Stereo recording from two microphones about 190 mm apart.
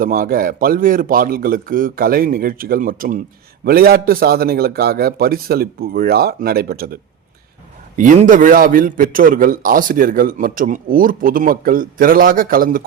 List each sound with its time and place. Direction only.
0.0 s a man's voice: 50° right (ahead or behind)
7.9 s a man's voice: 40° right (ahead or behind)